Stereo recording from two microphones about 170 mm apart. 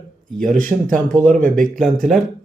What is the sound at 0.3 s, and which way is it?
Speech, 5° left (ahead or behind).